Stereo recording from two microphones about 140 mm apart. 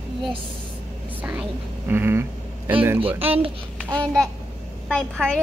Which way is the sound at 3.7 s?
10° left (ahead or behind).